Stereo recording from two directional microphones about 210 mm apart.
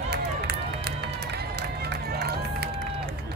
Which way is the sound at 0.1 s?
50° right (ahead or behind).